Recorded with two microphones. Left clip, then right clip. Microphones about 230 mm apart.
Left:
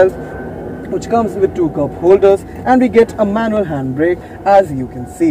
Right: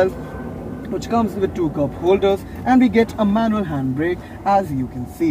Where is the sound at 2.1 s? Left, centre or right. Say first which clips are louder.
Left 8 dB; right.